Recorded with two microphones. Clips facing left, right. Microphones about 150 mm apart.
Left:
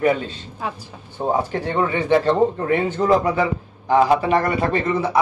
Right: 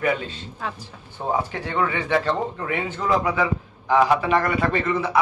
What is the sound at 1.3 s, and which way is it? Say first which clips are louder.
A man's voice: left 3 dB; 35° left (ahead or behind).